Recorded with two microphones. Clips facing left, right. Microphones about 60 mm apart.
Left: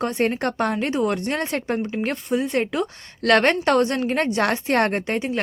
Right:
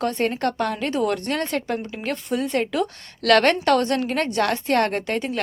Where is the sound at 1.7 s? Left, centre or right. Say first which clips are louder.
Left 3 dB; left.